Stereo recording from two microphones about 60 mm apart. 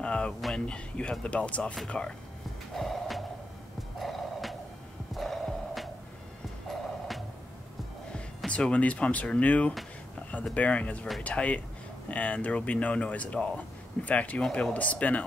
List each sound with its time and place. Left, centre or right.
0.0 s a sound: centre
0.7 s speech: centre
2.7 s snort: centre
4.0 s music: centre
8.5 s speech: left